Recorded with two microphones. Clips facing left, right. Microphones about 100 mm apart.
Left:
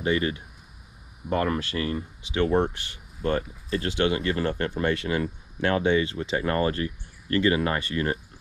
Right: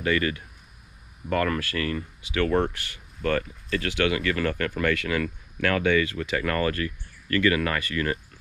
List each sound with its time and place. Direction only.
0.0 s speech: 20° left (ahead or behind)